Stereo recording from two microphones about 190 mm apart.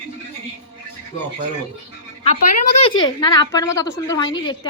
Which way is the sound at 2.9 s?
25° left (ahead or behind).